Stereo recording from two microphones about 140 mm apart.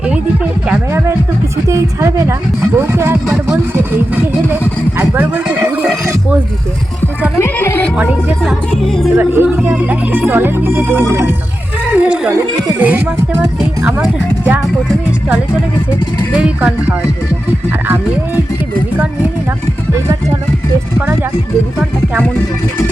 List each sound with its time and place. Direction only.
1.6 s a woman's voice: 20° right (ahead or behind)
3.2 s speech: 5° right (ahead or behind)
4.9 s a sound: 15° right (ahead or behind)
7.3 s music: 20° left (ahead or behind)
7.9 s music: 10° right (ahead or behind)
8.8 s speech: centre (ahead or behind)
9.1 s speech: 15° right (ahead or behind)
16.3 s speech: 5° right (ahead or behind)